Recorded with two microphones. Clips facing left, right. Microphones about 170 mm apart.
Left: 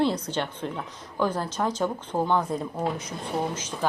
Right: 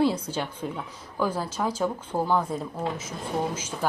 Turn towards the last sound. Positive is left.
turn(degrees=-10)  # may be behind; listen again after turning